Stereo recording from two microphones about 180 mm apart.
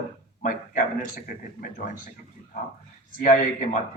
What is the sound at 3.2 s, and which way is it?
Speech, 45° left (ahead or behind).